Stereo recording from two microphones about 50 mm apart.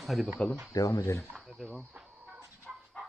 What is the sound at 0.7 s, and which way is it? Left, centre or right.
Speech, left.